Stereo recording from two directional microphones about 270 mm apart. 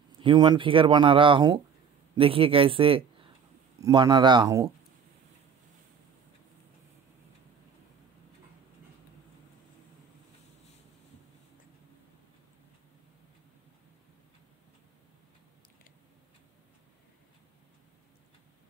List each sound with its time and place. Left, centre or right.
0.2 s speech: centre